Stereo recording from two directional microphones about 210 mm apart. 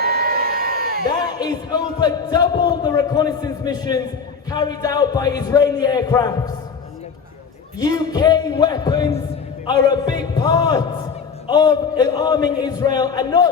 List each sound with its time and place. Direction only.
0.0 s crowd: 45° right (ahead or behind)
1.2 s a man's voice: 20° left (ahead or behind)
7.8 s a man's voice: 20° left (ahead or behind)